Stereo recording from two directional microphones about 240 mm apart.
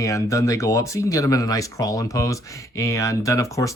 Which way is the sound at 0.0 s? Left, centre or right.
Centre.